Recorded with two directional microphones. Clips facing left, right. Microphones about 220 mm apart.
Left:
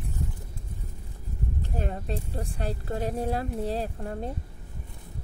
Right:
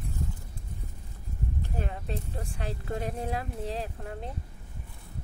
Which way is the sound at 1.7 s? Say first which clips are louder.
Left 5 dB; 35° left (ahead or behind).